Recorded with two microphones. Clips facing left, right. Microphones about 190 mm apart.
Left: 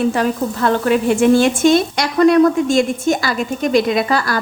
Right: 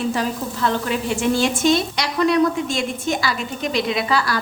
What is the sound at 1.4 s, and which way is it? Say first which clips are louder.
A woman's voice: left 5 dB; 50° left (ahead or behind).